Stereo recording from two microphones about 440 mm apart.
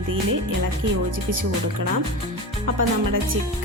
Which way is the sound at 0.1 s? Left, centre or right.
Right.